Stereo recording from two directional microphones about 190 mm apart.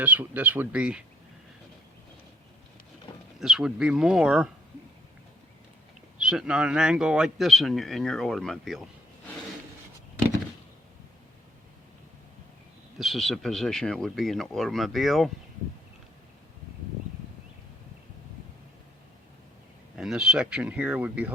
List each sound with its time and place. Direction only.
0.0 s speech: 10° right (ahead or behind)
3.1 s a sound: 25° left (ahead or behind)
3.4 s a man's voice: 5° right (ahead or behind)
6.1 s a man's voice: 5° right (ahead or behind)
13.0 s a man's voice: centre (ahead or behind)
20.0 s a man's voice: 5° right (ahead or behind)